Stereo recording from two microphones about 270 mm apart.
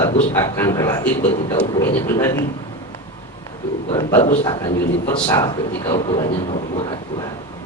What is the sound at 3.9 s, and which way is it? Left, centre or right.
Speech, centre.